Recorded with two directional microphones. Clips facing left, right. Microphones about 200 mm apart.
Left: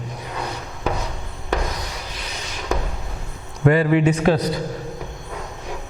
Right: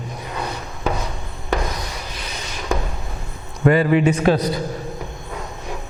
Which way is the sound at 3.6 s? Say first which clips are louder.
Right 1 dB; 15° right (ahead or behind).